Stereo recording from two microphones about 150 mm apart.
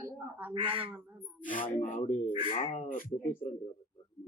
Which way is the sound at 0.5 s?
35° right (ahead or behind).